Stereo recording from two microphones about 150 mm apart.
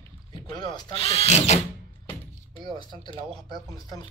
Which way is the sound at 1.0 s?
40° left (ahead or behind).